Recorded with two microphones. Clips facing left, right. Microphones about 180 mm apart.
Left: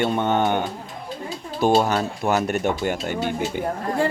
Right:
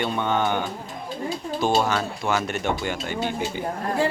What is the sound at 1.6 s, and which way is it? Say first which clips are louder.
Speech: left 4 dB; 15° left (ahead or behind).